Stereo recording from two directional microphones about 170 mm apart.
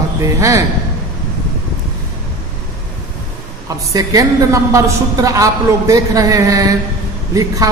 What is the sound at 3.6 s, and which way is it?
Speech, 20° right (ahead or behind).